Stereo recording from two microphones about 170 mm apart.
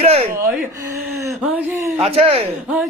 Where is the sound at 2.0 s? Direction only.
35° right (ahead or behind).